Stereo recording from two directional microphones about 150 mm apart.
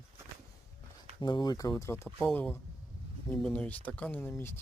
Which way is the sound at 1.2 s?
30° left (ahead or behind).